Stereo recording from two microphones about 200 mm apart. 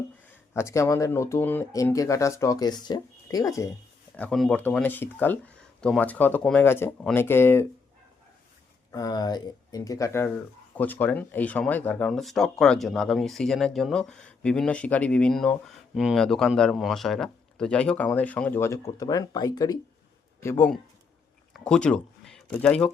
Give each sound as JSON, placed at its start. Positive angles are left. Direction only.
{"t": 0.5, "sound": "speech", "side_deg": 15}
{"t": 4.2, "sound": "speech", "side_deg": 5}
{"t": 8.9, "sound": "speech", "side_deg": 20}